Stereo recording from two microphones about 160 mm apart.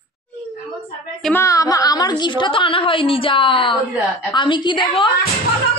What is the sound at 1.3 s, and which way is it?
A woman's voice, 20° left (ahead or behind).